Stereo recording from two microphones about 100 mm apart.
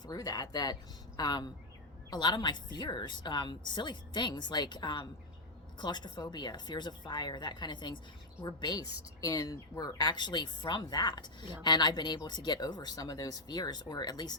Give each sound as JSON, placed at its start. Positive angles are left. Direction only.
{"t": 0.0, "sound": "a woman's voice", "side_deg": 40}